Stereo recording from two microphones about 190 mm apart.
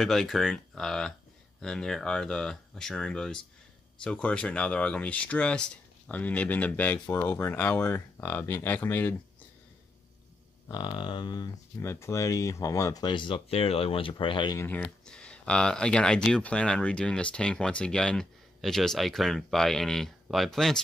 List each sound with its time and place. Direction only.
0.0 s speech: centre (ahead or behind)
10.7 s speech: 25° left (ahead or behind)
14.6 s speech: 10° left (ahead or behind)